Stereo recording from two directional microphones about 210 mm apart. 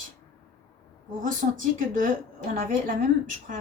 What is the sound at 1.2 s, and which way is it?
Speech, 40° right (ahead or behind).